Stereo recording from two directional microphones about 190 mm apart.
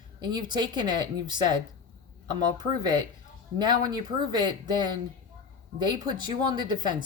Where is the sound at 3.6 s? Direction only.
20° right (ahead or behind).